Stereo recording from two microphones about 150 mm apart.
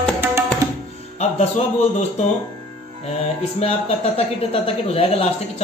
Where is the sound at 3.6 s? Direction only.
40° left (ahead or behind).